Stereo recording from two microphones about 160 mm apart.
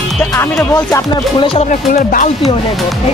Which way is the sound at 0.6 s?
20° left (ahead or behind).